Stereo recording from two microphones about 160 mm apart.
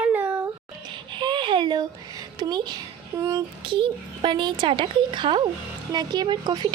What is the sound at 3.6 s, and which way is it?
A child's voice, 30° right (ahead or behind).